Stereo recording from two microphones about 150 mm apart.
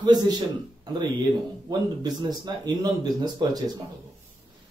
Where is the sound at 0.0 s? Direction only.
25° right (ahead or behind).